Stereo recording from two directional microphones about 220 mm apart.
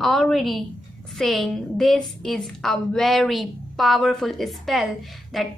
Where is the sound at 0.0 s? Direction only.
Centre (ahead or behind).